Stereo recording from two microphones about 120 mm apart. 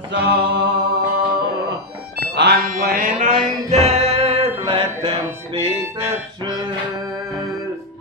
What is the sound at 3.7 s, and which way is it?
Music, 65° right (ahead or behind).